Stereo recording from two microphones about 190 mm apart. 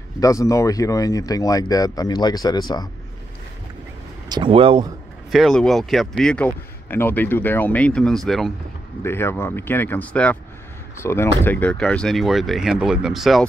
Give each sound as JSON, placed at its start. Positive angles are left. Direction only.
{"t": 0.2, "sound": "speech", "side_deg": 15}
{"t": 4.3, "sound": "speech", "side_deg": -25}
{"t": 5.3, "sound": "speech", "side_deg": 0}